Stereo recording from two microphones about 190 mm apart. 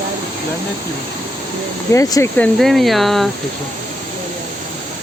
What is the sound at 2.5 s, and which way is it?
Speech, centre (ahead or behind).